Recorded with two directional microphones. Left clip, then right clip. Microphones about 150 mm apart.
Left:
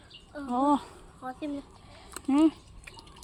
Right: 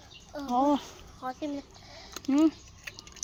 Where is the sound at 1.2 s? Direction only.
25° right (ahead or behind).